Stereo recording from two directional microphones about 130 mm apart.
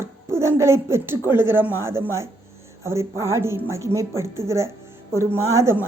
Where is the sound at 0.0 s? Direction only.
20° right (ahead or behind).